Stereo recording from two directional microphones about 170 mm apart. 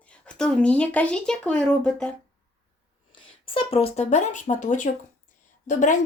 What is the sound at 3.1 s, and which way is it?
Speech, 35° left (ahead or behind).